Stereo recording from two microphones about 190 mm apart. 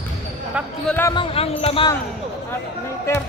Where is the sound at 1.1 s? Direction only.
30° left (ahead or behind).